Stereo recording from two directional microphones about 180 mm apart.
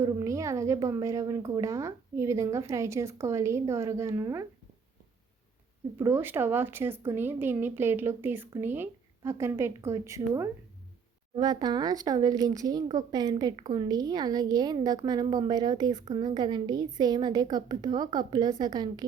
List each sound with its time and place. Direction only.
0.0 s speech: 15° right (ahead or behind)
6.0 s speech: 10° right (ahead or behind)